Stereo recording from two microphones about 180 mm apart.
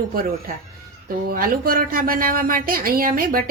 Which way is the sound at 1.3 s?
50° right (ahead or behind).